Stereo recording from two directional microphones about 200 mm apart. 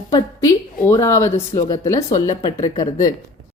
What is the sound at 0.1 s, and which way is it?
A woman's voice, 15° left (ahead or behind).